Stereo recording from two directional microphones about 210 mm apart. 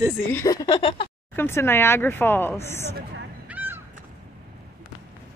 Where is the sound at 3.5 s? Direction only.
10° right (ahead or behind).